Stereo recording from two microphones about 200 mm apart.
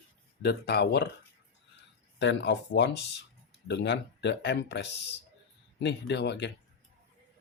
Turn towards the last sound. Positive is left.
turn(degrees=60)  # may be behind; listen again after turning